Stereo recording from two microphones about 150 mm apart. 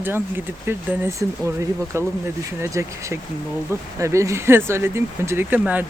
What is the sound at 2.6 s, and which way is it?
Speech, 15° right (ahead or behind).